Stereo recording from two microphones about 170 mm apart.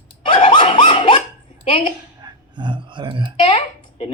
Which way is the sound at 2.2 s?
25° right (ahead or behind).